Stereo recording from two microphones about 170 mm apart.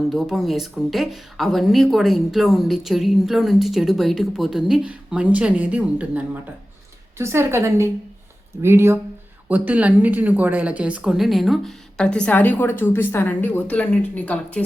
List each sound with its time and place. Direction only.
0.1 s a woman's voice: centre (ahead or behind)